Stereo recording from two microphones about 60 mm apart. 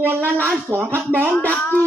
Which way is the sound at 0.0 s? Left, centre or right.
Right.